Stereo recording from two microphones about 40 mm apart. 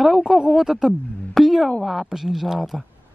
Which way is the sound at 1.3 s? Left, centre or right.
Centre.